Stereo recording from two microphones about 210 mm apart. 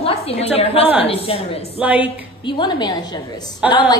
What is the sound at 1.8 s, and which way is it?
Speech, 5° right (ahead or behind).